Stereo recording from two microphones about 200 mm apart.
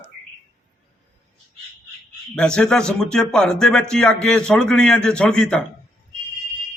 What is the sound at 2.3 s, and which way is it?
A man's voice, 5° left (ahead or behind).